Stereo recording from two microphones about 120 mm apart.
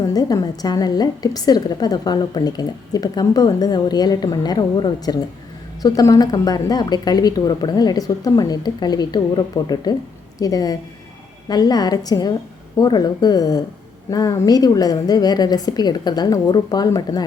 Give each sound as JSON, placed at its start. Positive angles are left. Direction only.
{"t": 0.1, "sound": "a woman's voice", "side_deg": 30}